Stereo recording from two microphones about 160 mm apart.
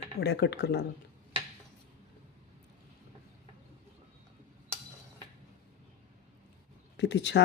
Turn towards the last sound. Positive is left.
turn(degrees=90)